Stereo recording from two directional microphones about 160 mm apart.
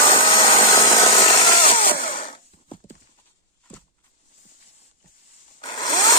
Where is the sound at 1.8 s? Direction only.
60° left (ahead or behind).